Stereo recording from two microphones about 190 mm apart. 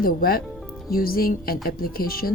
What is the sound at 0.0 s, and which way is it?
A woman's voice, 50° left (ahead or behind).